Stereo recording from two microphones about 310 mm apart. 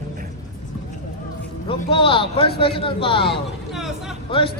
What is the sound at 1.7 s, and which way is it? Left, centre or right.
A man's voice, centre.